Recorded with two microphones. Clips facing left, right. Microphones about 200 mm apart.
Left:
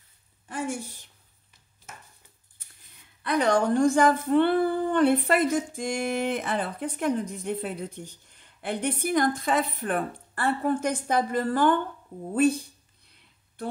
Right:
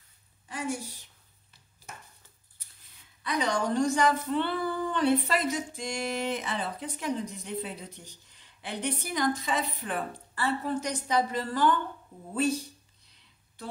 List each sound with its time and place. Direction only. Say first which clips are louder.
0.5 s a woman's voice: left 2 dB; 50° left (ahead or behind)
3.3 s speech: left 6 dB; 55° left (ahead or behind)